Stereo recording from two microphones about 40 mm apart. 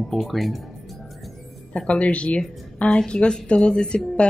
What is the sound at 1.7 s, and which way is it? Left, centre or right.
A woman's voice, left.